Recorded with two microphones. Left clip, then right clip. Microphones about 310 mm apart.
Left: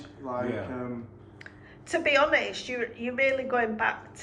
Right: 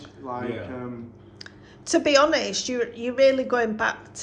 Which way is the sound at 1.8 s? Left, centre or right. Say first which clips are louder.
Right 5 dB; centre.